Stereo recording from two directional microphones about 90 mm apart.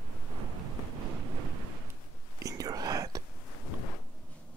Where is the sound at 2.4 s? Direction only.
45° right (ahead or behind).